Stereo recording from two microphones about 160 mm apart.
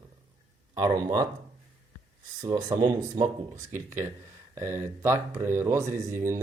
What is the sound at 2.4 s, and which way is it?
Speech, 25° right (ahead or behind).